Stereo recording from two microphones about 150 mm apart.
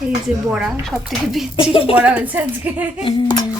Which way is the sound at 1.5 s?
35° left (ahead or behind).